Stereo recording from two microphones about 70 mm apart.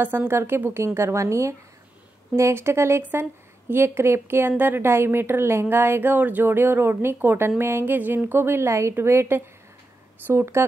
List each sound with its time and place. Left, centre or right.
0.0 s a woman's voice: right